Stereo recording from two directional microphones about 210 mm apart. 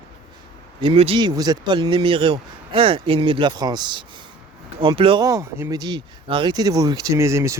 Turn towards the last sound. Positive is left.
turn(degrees=-15)  # may be behind; listen again after turning